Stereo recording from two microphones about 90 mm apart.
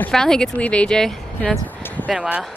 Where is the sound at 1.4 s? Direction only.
15° left (ahead or behind).